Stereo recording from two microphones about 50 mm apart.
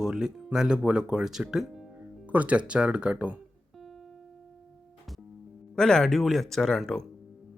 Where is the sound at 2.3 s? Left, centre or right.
Right.